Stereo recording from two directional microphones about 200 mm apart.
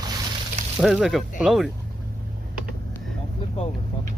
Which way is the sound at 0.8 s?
Centre (ahead or behind).